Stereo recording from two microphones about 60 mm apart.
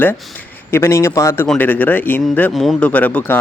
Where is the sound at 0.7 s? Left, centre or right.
Left.